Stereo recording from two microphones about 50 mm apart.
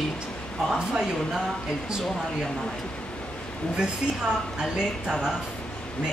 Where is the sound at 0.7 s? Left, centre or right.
Centre.